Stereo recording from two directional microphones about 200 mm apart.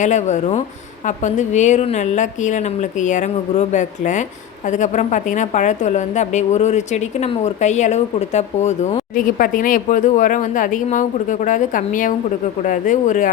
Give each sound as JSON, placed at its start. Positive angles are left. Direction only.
{"t": 0.0, "sound": "a woman's voice", "side_deg": 35}